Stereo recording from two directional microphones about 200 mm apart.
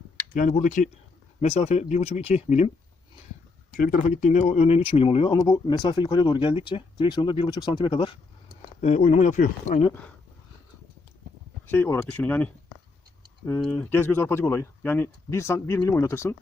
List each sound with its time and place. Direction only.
0.3 s speech: 40° left (ahead or behind)
3.8 s speech: 45° left (ahead or behind); by 8.2 s 25° left (ahead or behind)
8.8 s speech: 35° left (ahead or behind)
11.6 s speech: 10° left (ahead or behind)